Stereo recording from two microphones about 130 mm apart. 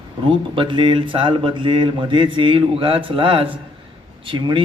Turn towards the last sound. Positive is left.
turn(degrees=-40)  # may be behind; listen again after turning